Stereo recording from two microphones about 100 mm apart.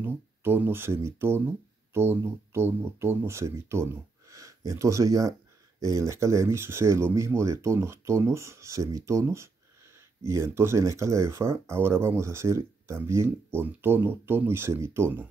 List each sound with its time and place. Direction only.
0.0 s speech: 20° right (ahead or behind)